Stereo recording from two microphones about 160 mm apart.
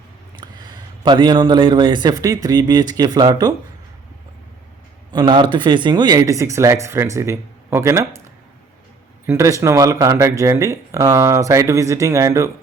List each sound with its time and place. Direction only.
0.3 s a man's voice: 30° right (ahead or behind)
5.1 s speech: 30° right (ahead or behind)
9.2 s speech: 15° right (ahead or behind)